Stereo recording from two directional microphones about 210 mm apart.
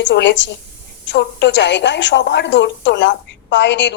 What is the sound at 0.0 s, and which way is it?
A woman's voice, 55° left (ahead or behind).